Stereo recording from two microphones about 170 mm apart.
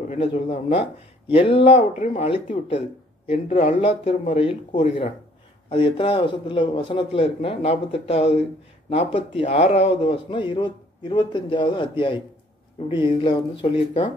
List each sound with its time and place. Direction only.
0.1 s a man's voice: 35° left (ahead or behind)
13.2 s a man's voice: 30° left (ahead or behind)